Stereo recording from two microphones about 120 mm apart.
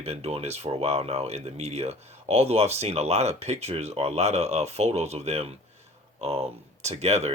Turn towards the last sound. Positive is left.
turn(degrees=-65)  # may be behind; listen again after turning